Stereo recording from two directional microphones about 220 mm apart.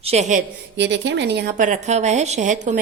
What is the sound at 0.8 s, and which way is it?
Speech, 55° right (ahead or behind).